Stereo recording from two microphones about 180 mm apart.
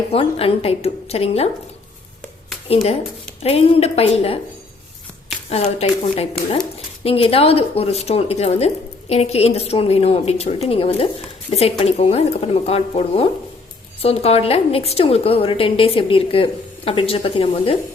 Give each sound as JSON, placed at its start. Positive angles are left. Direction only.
{"t": 0.1, "sound": "speech", "side_deg": 30}
{"t": 2.6, "sound": "speech", "side_deg": 35}
{"t": 5.5, "sound": "speech", "side_deg": 40}